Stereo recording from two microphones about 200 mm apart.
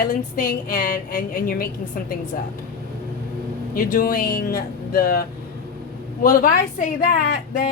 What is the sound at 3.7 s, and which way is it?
A woman's voice, 45° left (ahead or behind).